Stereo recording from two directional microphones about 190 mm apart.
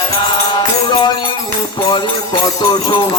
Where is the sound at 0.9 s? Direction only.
25° left (ahead or behind).